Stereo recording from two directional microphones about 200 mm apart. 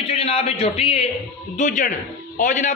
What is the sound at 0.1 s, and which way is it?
A man's voice, 30° left (ahead or behind).